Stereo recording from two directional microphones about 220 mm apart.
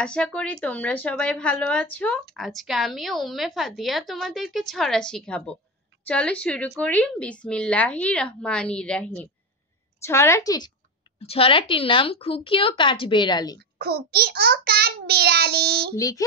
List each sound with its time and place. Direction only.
0.0 s a woman's voice: 5° left (ahead or behind)
13.6 s a child's voice: 45° right (ahead or behind)
16.0 s a woman's voice: 15° left (ahead or behind)